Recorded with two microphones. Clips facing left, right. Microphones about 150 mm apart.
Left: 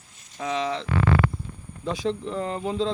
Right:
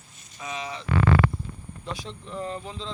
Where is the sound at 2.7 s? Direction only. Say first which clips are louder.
Left 11 dB; 55° left (ahead or behind).